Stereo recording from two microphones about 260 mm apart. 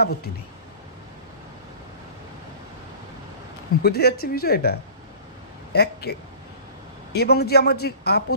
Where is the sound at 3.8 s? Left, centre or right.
Left.